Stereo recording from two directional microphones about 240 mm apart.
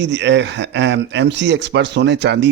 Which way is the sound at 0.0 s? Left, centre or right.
Right.